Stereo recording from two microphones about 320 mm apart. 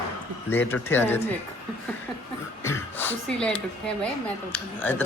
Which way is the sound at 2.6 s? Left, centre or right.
Centre.